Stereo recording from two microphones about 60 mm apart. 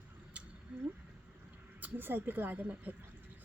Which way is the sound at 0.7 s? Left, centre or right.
Centre.